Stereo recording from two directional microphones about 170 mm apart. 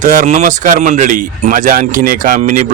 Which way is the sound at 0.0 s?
50° right (ahead or behind).